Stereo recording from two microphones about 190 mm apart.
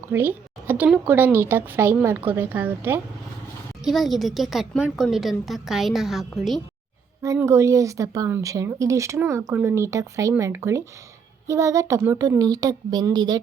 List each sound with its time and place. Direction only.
0.1 s speech: 10° right (ahead or behind)
3.8 s a woman's voice: centre (ahead or behind)
7.2 s speech: 15° right (ahead or behind)